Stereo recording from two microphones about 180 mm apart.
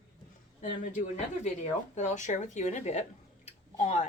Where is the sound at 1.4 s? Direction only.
40° left (ahead or behind).